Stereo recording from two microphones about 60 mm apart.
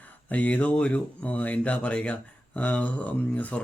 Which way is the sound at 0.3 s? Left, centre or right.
Left.